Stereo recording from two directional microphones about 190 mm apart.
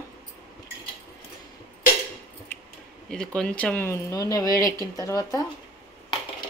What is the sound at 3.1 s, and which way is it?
Speech, 5° left (ahead or behind).